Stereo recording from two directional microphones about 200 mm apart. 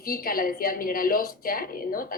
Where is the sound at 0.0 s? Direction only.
45° left (ahead or behind).